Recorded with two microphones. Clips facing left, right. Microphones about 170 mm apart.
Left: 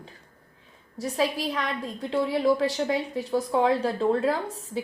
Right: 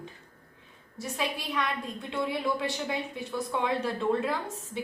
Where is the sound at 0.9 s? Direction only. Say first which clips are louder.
Left 7 dB; 35° left (ahead or behind).